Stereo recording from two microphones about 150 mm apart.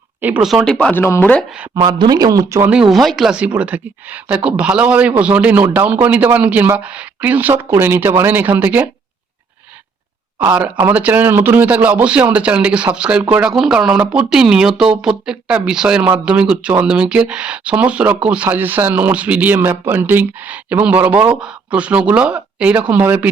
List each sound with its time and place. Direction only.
0.2 s speech: 10° right (ahead or behind); by 1.5 s 10° left (ahead or behind)
1.7 s speech: 30° right (ahead or behind)
2.9 s speech: centre (ahead or behind)
10.4 s speech: 10° right (ahead or behind)